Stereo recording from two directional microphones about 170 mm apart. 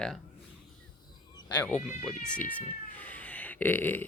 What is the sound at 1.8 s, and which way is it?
Speech, centre (ahead or behind).